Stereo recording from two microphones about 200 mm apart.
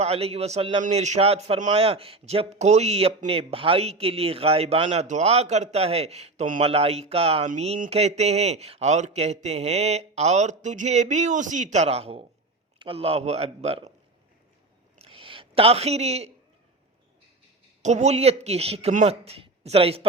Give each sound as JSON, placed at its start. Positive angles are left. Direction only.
{"t": 0.0, "sound": "a man's voice", "side_deg": -30}
{"t": 14.9, "sound": "a sound", "side_deg": -30}
{"t": 17.8, "sound": "a man's voice", "side_deg": -35}